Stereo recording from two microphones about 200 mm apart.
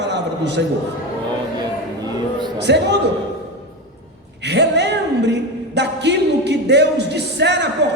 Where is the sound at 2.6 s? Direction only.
60° right (ahead or behind).